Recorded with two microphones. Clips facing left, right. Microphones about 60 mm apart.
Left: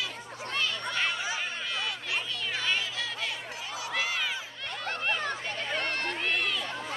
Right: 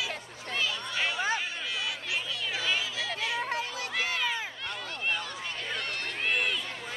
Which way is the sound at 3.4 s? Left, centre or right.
Right.